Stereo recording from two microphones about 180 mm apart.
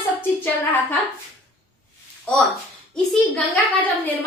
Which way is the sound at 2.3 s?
5° left (ahead or behind).